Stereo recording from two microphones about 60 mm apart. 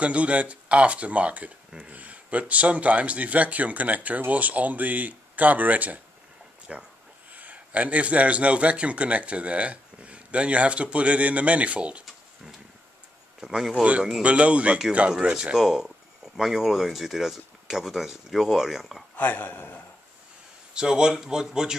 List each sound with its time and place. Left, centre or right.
0.0 s speech: right
13.4 s speech: centre
14.2 s speech: right; by 19.0 s centre
19.1 s speech: left
20.7 s speech: centre